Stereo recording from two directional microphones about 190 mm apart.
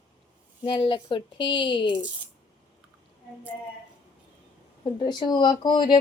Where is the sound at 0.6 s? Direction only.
25° left (ahead or behind).